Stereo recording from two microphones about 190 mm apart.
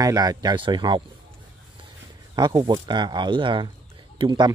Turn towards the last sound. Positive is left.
turn(degrees=-25)  # may be behind; listen again after turning